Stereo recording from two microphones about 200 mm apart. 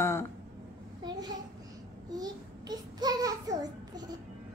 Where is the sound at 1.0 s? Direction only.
20° right (ahead or behind).